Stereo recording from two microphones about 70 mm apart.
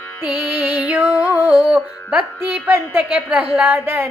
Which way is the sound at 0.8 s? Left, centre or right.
Right.